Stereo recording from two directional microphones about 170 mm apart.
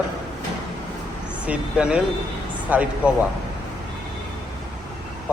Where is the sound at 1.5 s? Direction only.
5° right (ahead or behind).